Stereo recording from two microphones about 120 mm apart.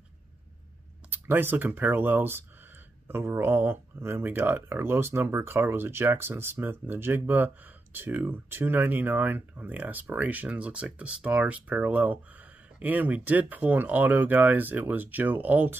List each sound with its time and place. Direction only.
1.1 s speech: 15° right (ahead or behind)